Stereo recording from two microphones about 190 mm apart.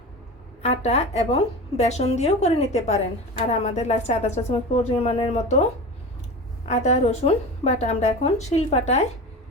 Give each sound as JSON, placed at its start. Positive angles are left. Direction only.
{"t": 0.6, "sound": "a woman's voice", "side_deg": 35}
{"t": 6.7, "sound": "a woman's voice", "side_deg": 35}